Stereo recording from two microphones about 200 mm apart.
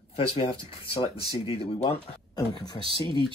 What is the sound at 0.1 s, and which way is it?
Speech, 30° left (ahead or behind).